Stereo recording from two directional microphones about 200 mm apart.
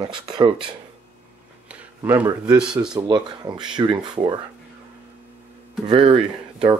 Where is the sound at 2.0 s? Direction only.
10° right (ahead or behind).